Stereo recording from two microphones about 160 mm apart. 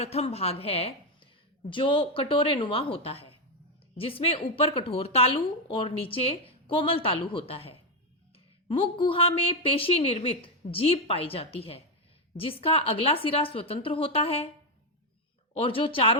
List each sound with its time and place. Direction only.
0.0 s a woman's voice: 40° left (ahead or behind)
15.5 s a woman's voice: 35° left (ahead or behind)